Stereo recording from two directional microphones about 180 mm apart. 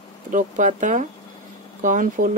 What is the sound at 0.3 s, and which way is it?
Speech, 45° right (ahead or behind).